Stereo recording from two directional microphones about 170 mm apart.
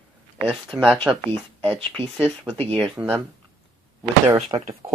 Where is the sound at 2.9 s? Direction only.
15° right (ahead or behind).